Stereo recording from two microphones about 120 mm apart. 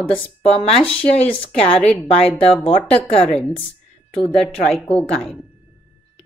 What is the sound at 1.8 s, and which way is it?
Speech, 10° left (ahead or behind).